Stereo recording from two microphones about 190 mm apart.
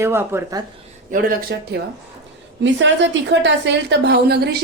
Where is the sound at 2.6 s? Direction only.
70° right (ahead or behind).